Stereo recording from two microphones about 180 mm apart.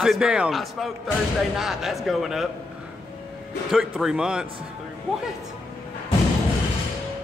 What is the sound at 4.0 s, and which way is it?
Speech, 5° right (ahead or behind).